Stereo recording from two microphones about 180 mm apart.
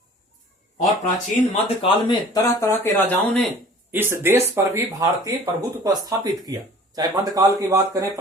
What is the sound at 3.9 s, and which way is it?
Speech, 15° right (ahead or behind).